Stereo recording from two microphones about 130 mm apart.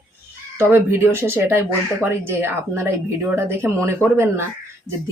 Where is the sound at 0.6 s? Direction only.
20° right (ahead or behind).